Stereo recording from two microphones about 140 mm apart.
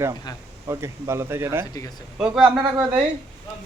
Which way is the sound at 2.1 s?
5° right (ahead or behind).